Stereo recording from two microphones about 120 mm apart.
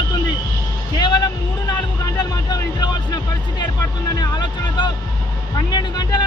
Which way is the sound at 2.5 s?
35° left (ahead or behind).